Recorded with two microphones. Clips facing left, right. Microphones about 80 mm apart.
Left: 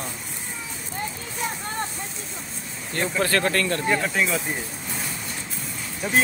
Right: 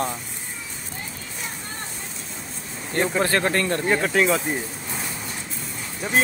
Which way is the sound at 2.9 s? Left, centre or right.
Right.